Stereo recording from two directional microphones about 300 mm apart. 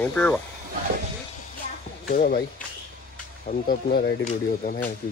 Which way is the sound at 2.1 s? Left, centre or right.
Left.